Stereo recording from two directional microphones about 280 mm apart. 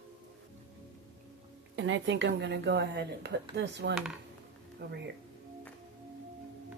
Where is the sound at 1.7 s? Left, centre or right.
Right.